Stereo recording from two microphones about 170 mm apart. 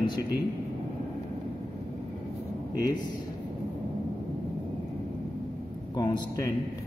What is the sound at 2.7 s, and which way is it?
Speech, 25° left (ahead or behind).